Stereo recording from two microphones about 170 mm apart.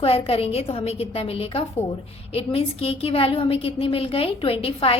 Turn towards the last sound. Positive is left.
turn(degrees=35)  # may be behind; listen again after turning